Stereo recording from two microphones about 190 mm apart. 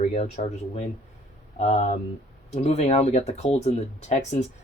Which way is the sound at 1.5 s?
35° left (ahead or behind).